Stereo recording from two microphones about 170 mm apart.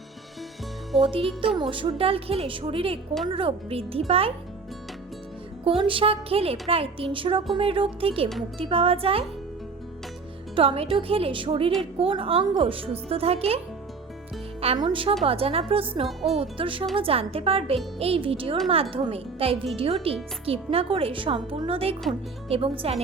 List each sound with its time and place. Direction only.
1.0 s speech: 35° right (ahead or behind)
5.6 s speech: 30° right (ahead or behind)
10.5 s speech: 35° right (ahead or behind)
14.6 s speech: 35° right (ahead or behind)
16.0 s speech: centre (ahead or behind)
16.4 s speech: 30° right (ahead or behind)